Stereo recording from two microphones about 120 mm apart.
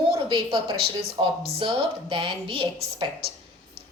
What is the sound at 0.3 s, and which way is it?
A woman's voice, 45° right (ahead or behind).